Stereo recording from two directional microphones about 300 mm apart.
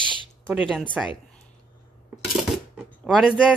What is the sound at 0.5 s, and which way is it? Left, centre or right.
Speech, centre.